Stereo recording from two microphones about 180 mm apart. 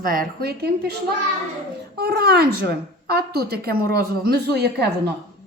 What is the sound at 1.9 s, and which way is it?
A woman's voice, 60° right (ahead or behind).